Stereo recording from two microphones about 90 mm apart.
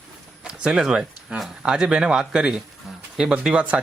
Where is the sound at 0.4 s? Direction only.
10° right (ahead or behind).